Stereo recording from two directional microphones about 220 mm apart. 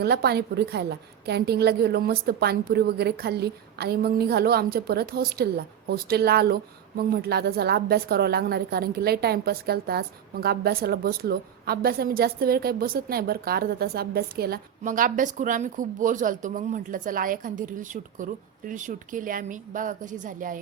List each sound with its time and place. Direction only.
0.0 s speech: 45° right (ahead or behind)